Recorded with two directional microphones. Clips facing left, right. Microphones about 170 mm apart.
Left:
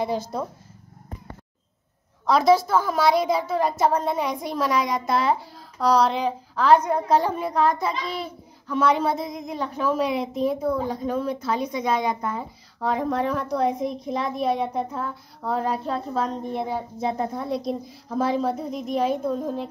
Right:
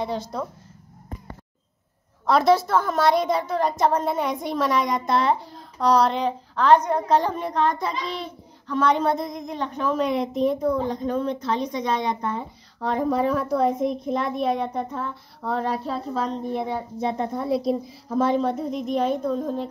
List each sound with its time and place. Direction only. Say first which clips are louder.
2.2 s a woman's voice: even; centre (ahead or behind)